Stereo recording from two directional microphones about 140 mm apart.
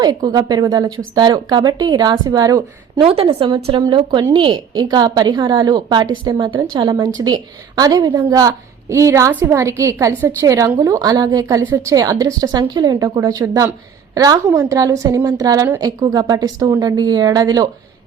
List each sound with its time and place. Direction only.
0.0 s a woman's voice: 30° right (ahead or behind)
3.0 s a woman's voice: 40° right (ahead or behind)